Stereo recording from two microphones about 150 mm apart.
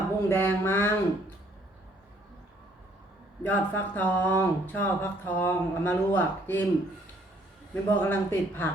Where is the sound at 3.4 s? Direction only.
10° left (ahead or behind).